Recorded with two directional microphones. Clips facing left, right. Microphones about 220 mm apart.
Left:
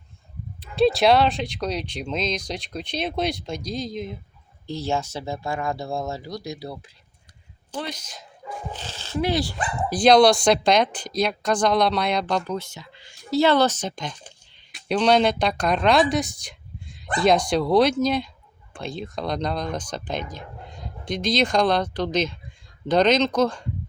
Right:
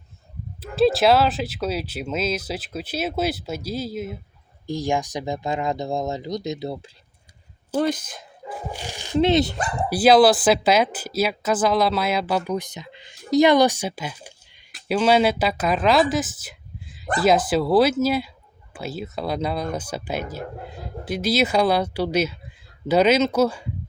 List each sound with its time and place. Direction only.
0.8 s speech: centre (ahead or behind); by 6.9 s 25° right (ahead or behind)
7.8 s speech: 50° right (ahead or behind)
8.4 s speech: 10° right (ahead or behind)
9.9 s speech: 5° right (ahead or behind)